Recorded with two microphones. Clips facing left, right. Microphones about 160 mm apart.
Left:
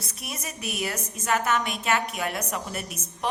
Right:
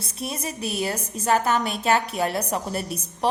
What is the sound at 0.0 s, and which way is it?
A woman's voice, 30° right (ahead or behind).